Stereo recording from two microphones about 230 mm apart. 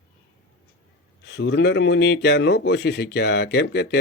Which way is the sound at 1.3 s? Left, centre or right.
Left.